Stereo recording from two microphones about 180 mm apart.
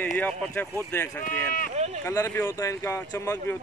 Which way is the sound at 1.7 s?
35° right (ahead or behind).